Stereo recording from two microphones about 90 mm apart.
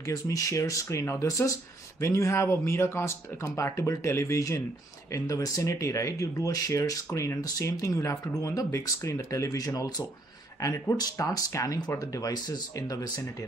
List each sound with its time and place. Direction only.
0.0 s speech: 40° left (ahead or behind)
10.6 s speech: 35° left (ahead or behind)